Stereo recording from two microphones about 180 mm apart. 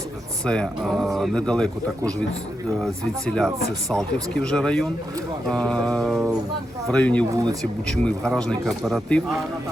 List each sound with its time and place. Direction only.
0.4 s speech: 5° left (ahead or behind)
7.3 s speech: 20° right (ahead or behind)
7.6 s speech: 5° left (ahead or behind)